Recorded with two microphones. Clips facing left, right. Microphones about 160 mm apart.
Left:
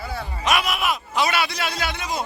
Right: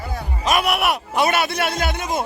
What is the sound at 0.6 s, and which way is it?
A man's voice, 65° right (ahead or behind).